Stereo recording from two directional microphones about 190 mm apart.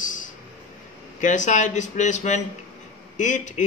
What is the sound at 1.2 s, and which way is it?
A man's voice, 40° left (ahead or behind).